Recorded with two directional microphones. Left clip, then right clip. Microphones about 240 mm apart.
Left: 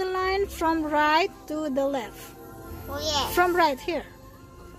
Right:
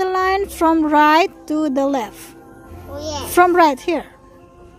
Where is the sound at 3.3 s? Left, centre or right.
Right.